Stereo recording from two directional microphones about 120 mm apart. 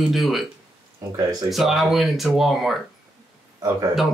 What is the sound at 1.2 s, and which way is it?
Speech, 30° right (ahead or behind).